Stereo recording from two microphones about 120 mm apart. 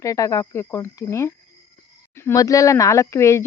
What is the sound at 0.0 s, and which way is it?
Speech, 25° left (ahead or behind).